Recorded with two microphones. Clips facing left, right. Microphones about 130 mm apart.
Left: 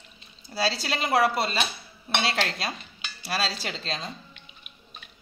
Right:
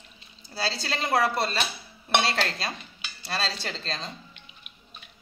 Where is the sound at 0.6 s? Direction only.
15° left (ahead or behind).